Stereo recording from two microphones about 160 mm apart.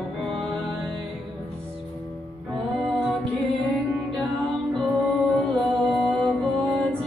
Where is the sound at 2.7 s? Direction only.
Centre (ahead or behind).